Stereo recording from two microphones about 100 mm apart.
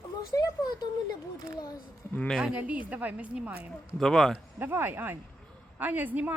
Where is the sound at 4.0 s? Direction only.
5° left (ahead or behind).